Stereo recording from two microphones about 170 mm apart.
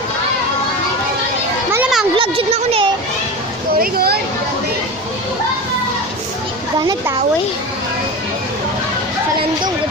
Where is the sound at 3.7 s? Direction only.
60° right (ahead or behind).